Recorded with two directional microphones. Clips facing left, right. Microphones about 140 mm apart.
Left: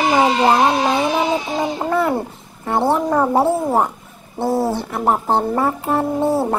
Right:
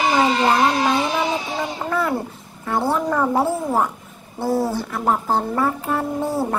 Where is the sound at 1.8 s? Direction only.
30° left (ahead or behind).